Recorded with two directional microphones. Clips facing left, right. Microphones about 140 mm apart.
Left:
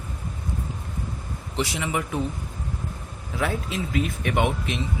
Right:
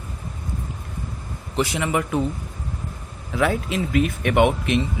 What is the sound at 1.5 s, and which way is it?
Speech, 60° right (ahead or behind).